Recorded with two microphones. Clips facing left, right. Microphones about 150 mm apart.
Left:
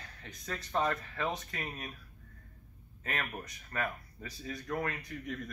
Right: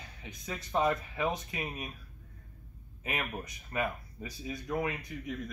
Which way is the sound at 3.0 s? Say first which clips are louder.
Right 2 dB; 10° right (ahead or behind).